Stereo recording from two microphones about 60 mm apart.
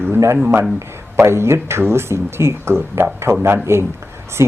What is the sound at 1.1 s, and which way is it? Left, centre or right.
A man's voice, right.